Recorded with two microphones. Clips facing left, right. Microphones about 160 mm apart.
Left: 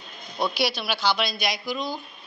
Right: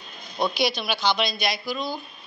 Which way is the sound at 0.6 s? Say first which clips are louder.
Right 1 dB; 10° left (ahead or behind).